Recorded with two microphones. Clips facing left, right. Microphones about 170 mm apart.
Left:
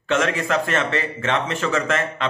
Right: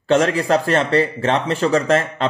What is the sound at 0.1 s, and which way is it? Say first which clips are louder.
Speech: right 5 dB; 35° right (ahead or behind).